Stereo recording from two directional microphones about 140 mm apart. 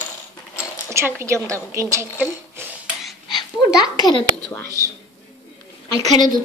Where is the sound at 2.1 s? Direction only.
15° right (ahead or behind).